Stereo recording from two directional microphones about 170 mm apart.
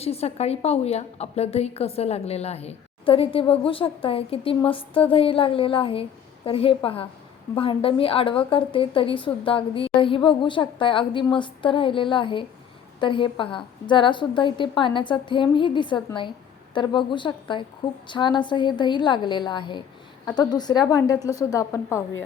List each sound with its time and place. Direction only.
0.0 s a woman's voice: 35° left (ahead or behind); by 22.0 s 15° left (ahead or behind)